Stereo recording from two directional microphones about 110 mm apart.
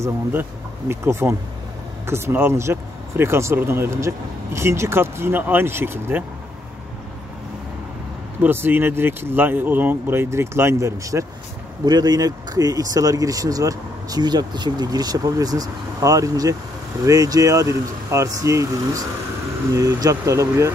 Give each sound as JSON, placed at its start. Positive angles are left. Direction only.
{"t": 0.0, "sound": "speech", "side_deg": -20}
{"t": 8.4, "sound": "speech", "side_deg": -20}